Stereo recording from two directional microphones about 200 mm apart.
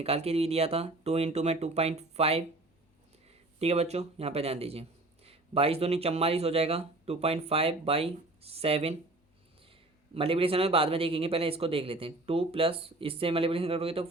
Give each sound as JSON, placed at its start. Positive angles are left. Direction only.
{"t": 0.0, "sound": "a man's voice", "side_deg": -30}
{"t": 10.2, "sound": "speech", "side_deg": -30}